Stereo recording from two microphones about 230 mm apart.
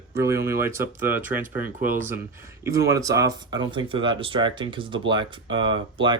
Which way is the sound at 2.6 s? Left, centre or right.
Centre.